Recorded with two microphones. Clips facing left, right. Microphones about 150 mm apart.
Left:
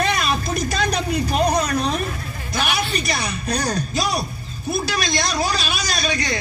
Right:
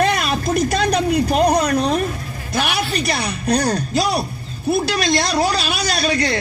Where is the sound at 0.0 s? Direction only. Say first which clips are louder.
Right 3 dB; 55° right (ahead or behind).